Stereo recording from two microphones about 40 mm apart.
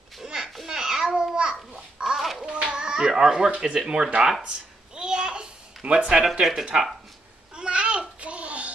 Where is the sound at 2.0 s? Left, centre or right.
Centre.